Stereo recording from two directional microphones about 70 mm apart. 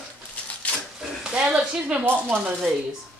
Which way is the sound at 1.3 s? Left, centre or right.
Centre.